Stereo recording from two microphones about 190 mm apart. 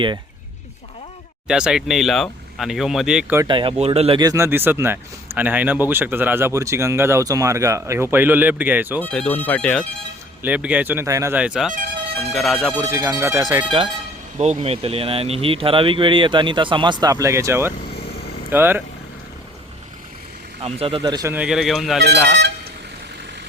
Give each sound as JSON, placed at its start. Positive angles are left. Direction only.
{"t": 1.5, "sound": "speech", "side_deg": -5}
{"t": 3.4, "sound": "speech", "side_deg": -25}
{"t": 9.0, "sound": "speech", "side_deg": 5}
{"t": 10.4, "sound": "speech", "side_deg": -5}
{"t": 12.8, "sound": "speech", "side_deg": -15}
{"t": 20.6, "sound": "speech", "side_deg": -30}
{"t": 21.1, "sound": "speech", "side_deg": -20}
{"t": 21.3, "sound": "speech", "side_deg": -5}
{"t": 22.0, "sound": "speech", "side_deg": -65}